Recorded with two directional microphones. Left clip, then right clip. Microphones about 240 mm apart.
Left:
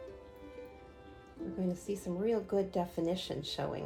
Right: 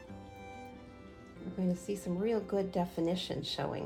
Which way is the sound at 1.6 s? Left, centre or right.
Right.